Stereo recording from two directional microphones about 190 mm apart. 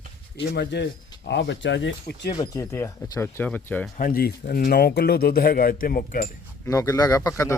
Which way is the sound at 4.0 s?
50° left (ahead or behind).